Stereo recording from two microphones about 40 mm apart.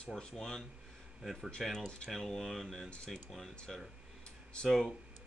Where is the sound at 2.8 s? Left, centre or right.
Centre.